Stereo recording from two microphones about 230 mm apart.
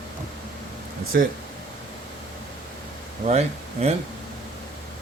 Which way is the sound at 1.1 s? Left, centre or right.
Right.